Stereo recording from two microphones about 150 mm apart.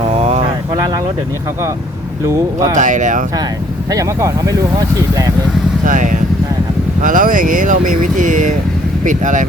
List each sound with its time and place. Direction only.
0.2 s vehicle: 45° right (ahead or behind)
2.2 s speech: 20° right (ahead or behind)
2.7 s speech: 60° right (ahead or behind)
3.9 s speech: 25° right (ahead or behind)
5.8 s speech: 60° right (ahead or behind)